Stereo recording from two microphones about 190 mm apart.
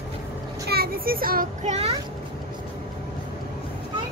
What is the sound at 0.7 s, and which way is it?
A child's voice, 55° right (ahead or behind).